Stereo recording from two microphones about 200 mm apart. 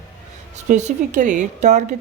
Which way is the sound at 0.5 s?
35° right (ahead or behind).